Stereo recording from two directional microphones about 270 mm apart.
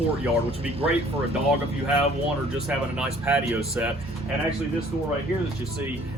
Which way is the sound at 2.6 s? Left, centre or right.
Centre.